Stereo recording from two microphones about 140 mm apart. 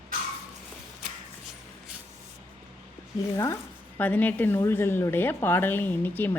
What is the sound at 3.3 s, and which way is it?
Speech, 25° left (ahead or behind).